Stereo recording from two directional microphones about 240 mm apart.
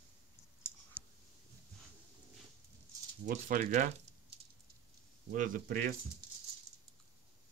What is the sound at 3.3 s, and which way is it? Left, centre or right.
Speech, right.